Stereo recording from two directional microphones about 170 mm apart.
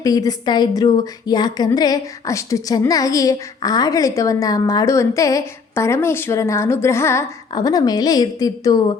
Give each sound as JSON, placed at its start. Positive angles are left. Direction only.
{"t": 0.0, "sound": "a woman's voice", "side_deg": 20}